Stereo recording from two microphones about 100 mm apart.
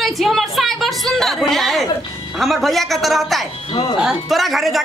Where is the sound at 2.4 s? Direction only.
Centre (ahead or behind).